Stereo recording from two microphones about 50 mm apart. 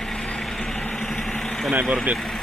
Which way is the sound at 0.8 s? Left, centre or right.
Left.